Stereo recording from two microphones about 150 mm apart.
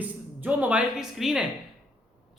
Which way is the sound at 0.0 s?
10° right (ahead or behind).